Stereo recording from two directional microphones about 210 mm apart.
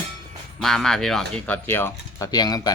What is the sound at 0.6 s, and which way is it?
Speech, centre (ahead or behind).